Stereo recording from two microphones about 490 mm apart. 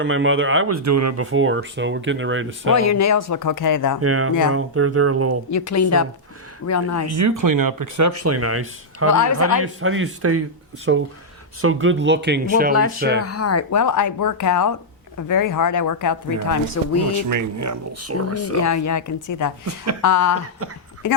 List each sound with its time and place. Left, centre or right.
0.0 s speech: right
2.7 s speech: left
4.0 s speech: right
5.5 s speech: left
7.2 s speech: right
9.0 s speech: left
9.6 s speech: right
13.2 s speech: left
17.2 s speech: right
18.5 s speech: left
19.6 s speech: right
20.0 s speech: left